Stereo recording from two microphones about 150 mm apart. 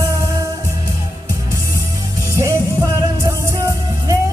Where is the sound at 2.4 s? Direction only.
20° right (ahead or behind).